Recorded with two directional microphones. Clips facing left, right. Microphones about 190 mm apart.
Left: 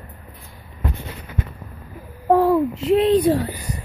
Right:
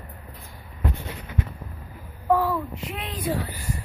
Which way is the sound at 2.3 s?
30° left (ahead or behind).